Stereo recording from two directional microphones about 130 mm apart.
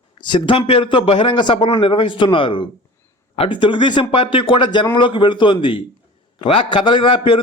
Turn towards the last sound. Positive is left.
turn(degrees=40)  # may be behind; listen again after turning